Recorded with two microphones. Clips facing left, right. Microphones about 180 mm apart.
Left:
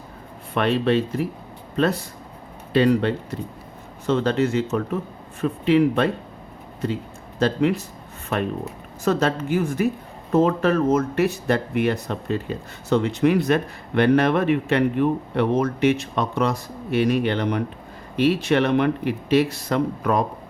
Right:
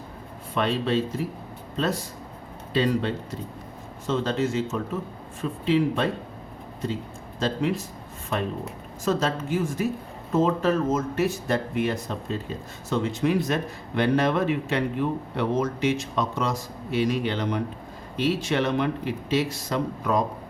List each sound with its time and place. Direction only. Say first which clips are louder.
0.5 s speech: left 4 dB; 60° left (ahead or behind)
7.3 s speech: left 5 dB; 65° left (ahead or behind)
9.0 s speech: left 4 dB; 65° left (ahead or behind)